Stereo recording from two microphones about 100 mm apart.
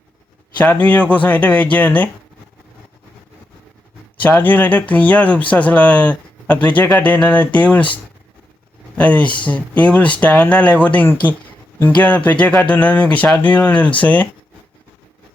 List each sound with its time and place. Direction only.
0.6 s speech: 15° left (ahead or behind)
4.2 s speech: 20° left (ahead or behind)
9.0 s speech: 15° left (ahead or behind)